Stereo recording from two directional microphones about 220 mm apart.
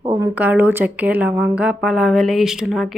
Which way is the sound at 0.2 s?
10° right (ahead or behind).